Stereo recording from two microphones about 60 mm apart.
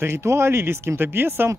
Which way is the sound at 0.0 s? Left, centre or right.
Right.